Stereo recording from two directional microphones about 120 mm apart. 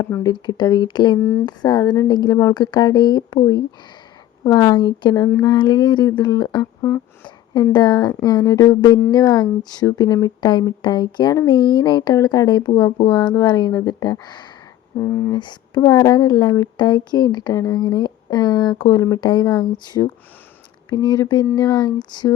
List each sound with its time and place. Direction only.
0.0 s speech: 30° left (ahead or behind)
4.4 s speech: 35° left (ahead or behind)
7.7 s speech: 35° left (ahead or behind)
14.9 s speech: 20° left (ahead or behind)
15.4 s speech: 40° left (ahead or behind)